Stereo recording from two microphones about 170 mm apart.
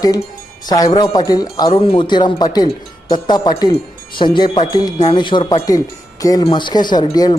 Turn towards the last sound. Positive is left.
turn(degrees=25)  # may be behind; listen again after turning